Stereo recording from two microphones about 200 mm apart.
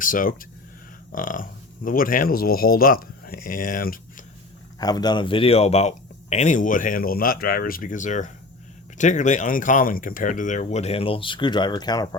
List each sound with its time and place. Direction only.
0.0 s speech: 45° left (ahead or behind)
4.8 s speech: 20° left (ahead or behind)